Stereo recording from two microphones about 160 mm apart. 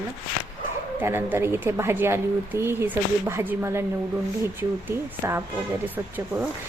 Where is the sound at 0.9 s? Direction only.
15° right (ahead or behind).